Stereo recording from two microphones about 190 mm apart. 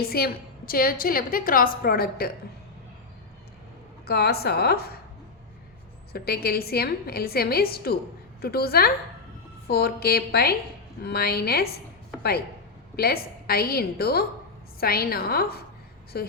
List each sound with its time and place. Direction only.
0.0 s a woman's voice: 55° left (ahead or behind)
4.0 s a woman's voice: 55° left (ahead or behind)
6.1 s a woman's voice: 55° left (ahead or behind)
13.0 s a woman's voice: 55° left (ahead or behind)